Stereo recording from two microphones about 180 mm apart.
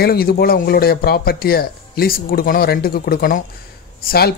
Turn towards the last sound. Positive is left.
turn(degrees=55)  # may be behind; listen again after turning